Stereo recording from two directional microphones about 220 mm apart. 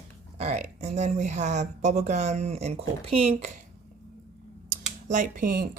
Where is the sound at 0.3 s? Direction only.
30° right (ahead or behind).